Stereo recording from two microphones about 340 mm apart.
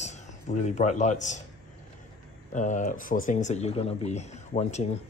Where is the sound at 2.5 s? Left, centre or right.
Left.